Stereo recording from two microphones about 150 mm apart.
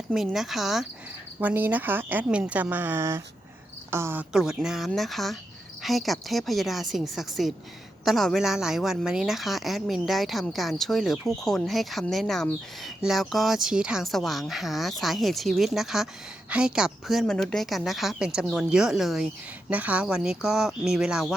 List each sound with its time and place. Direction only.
0.1 s a woman's voice: centre (ahead or behind)
1.4 s speech: 10° right (ahead or behind)
4.3 s a woman's voice: 5° right (ahead or behind)